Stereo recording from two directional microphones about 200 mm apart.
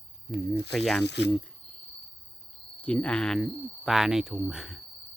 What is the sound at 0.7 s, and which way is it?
Speech, centre (ahead or behind).